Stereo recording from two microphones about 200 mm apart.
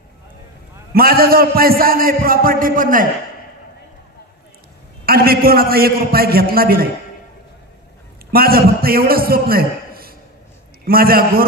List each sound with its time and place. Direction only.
0.9 s a man's voice: 50° right (ahead or behind)
5.0 s a man's voice: 50° right (ahead or behind)
8.3 s a man's voice: 50° right (ahead or behind)